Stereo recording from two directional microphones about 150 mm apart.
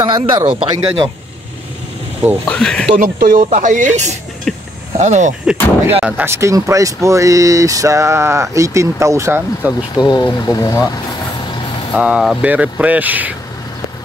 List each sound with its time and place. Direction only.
0.0 s a man's voice: 30° right (ahead or behind)
2.4 s speech: 5° left (ahead or behind)
3.0 s speech: 65° right (ahead or behind)
4.5 s speech: centre (ahead or behind)
4.9 s speech: 50° right (ahead or behind)
5.5 s speech: 10° right (ahead or behind)
9.9 s speech: 30° left (ahead or behind)
11.9 s speech: 5° right (ahead or behind)